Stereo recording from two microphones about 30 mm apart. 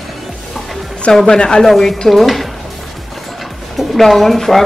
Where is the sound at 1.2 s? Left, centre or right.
Left.